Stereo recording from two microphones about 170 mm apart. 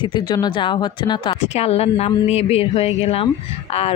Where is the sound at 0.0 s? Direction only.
25° left (ahead or behind).